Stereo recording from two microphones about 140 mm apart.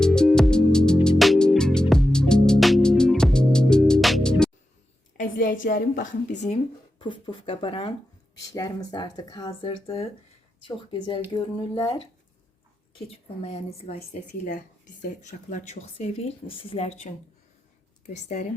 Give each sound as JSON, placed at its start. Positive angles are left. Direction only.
{"t": 0.0, "sound": "music", "side_deg": 5}
{"t": 5.1, "sound": "a woman's voice", "side_deg": 75}
{"t": 7.0, "sound": "speech", "side_deg": 35}
{"t": 8.5, "sound": "speech", "side_deg": 25}
{"t": 13.4, "sound": "speech", "side_deg": 45}
{"t": 15.2, "sound": "speech", "side_deg": 55}
{"t": 18.0, "sound": "speech", "side_deg": 65}